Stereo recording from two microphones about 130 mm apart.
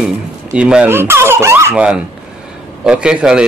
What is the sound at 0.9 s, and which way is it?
Speech, 20° right (ahead or behind).